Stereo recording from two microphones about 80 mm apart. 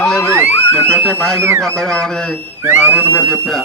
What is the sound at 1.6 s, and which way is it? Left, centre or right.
Speech, centre.